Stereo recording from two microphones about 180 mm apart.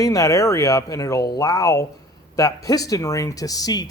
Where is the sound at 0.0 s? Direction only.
20° left (ahead or behind).